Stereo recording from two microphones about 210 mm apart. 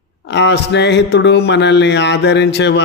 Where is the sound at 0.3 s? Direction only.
55° left (ahead or behind).